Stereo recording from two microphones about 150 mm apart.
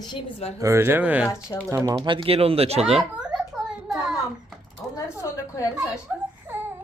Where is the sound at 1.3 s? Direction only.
20° left (ahead or behind).